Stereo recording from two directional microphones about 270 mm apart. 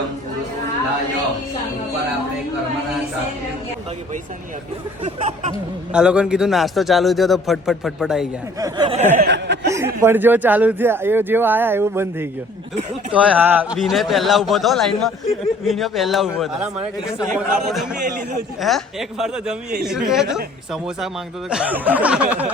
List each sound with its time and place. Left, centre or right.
5.0 s speech: right
5.9 s a man's voice: centre
8.5 s speech: centre
9.2 s speech: right
9.6 s speech: centre
12.7 s speech: right
13.1 s a man's voice: centre
21.5 s a man's voice: centre